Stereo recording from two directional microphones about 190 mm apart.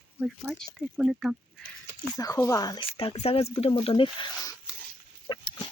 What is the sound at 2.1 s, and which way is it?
Speech, 20° left (ahead or behind).